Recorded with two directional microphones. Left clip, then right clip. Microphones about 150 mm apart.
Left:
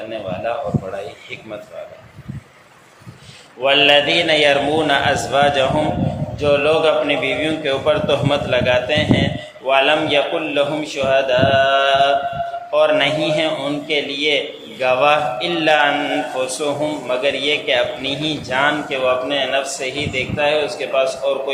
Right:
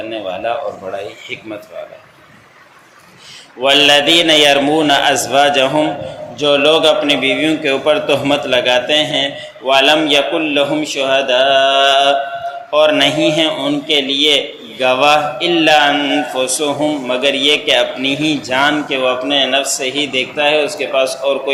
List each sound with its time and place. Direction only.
0.5 s a man's voice: 35° right (ahead or behind)
3.6 s a man's voice: 40° right (ahead or behind)